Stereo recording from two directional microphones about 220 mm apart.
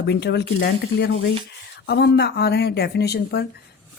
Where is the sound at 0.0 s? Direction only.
50° left (ahead or behind).